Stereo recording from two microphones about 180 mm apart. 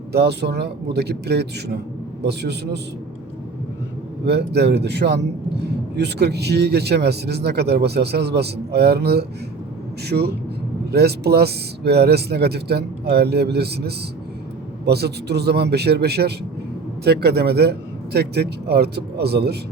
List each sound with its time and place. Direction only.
0.1 s a man's voice: 65° right (ahead or behind)
4.3 s a man's voice: 65° right (ahead or behind)